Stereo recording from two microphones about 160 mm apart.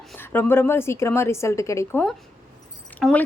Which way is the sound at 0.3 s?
15° left (ahead or behind).